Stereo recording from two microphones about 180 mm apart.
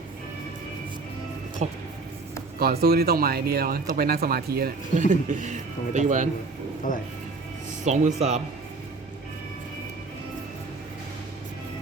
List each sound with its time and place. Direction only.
1.6 s speech: 40° right (ahead or behind)
2.6 s speech: 60° right (ahead or behind)
4.9 s speech: 40° right (ahead or behind)
7.9 s speech: 40° right (ahead or behind)